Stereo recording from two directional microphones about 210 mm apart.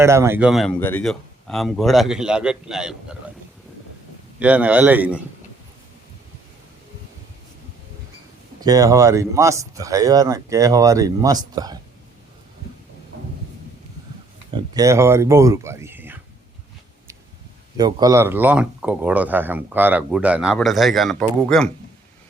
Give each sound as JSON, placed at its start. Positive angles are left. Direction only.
{"t": 0.0, "sound": "a man's voice", "side_deg": -15}
{"t": 4.4, "sound": "speech", "side_deg": -5}
{"t": 8.6, "sound": "speech", "side_deg": -15}
{"t": 14.5, "sound": "speech", "side_deg": -15}
{"t": 17.7, "sound": "speech", "side_deg": -20}